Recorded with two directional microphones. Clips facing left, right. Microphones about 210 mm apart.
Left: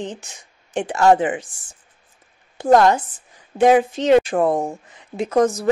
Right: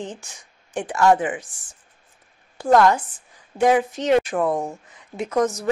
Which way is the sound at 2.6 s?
20° left (ahead or behind).